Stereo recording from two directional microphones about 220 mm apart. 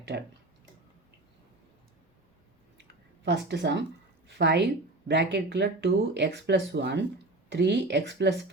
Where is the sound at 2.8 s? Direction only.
50° right (ahead or behind).